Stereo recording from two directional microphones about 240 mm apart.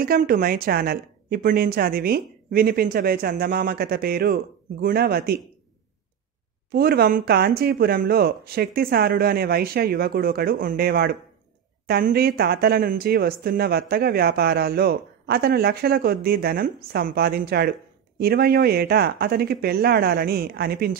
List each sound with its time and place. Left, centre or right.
0.0 s speech: right
6.7 s speech: right